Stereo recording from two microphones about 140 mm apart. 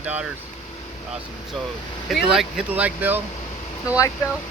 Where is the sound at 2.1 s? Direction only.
5° right (ahead or behind).